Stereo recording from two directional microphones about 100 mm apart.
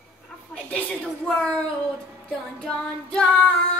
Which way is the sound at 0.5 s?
10° left (ahead or behind).